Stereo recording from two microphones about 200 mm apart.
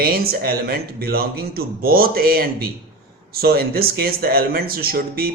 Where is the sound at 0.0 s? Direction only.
50° right (ahead or behind).